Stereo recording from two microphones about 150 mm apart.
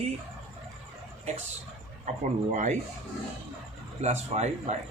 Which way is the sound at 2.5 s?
55° right (ahead or behind).